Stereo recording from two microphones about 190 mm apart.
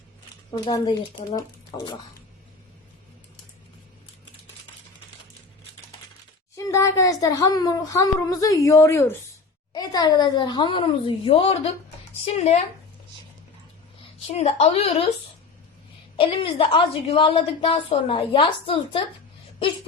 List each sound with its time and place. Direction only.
0.5 s a woman's voice: 20° left (ahead or behind)
6.6 s a woman's voice: 15° left (ahead or behind); by 12.5 s 30° left (ahead or behind)
14.3 s a woman's voice: 30° left (ahead or behind)
16.1 s a woman's voice: 30° left (ahead or behind)